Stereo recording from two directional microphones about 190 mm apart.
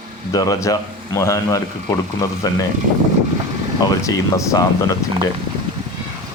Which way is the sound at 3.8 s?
15° left (ahead or behind).